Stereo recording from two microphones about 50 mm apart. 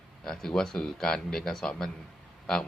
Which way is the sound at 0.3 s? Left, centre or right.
Centre.